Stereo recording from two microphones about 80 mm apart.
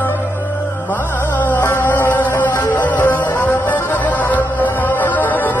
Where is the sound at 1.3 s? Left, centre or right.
Left.